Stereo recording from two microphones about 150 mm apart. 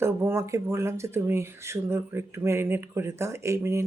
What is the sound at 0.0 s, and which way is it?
Speech, 15° right (ahead or behind).